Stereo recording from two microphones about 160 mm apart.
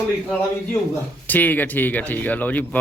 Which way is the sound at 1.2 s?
10° left (ahead or behind).